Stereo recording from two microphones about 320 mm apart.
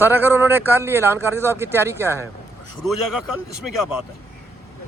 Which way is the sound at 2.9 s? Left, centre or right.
Left.